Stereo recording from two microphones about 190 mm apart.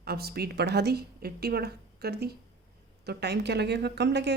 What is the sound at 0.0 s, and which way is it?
Speech, 55° right (ahead or behind).